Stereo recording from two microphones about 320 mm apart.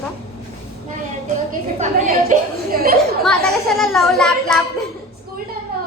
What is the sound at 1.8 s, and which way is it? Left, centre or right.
A woman's voice, right.